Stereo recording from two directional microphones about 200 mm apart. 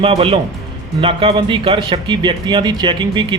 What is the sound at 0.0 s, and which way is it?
Speech, 25° right (ahead or behind).